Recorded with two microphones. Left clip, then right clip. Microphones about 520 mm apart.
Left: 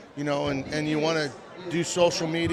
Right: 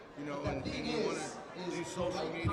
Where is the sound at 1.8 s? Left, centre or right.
Left.